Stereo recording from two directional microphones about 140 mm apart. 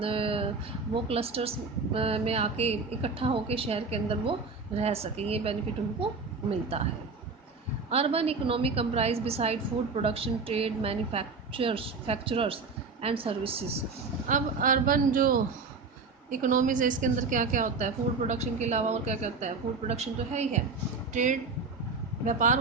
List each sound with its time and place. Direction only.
0.0 s a woman's voice: 40° right (ahead or behind)
7.9 s a woman's voice: 45° right (ahead or behind)
14.3 s speech: 70° right (ahead or behind); by 15.4 s 90° right
16.3 s a woman's voice: 70° right (ahead or behind)